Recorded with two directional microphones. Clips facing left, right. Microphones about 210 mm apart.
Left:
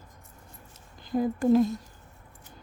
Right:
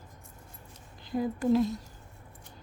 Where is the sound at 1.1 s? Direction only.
45° left (ahead or behind).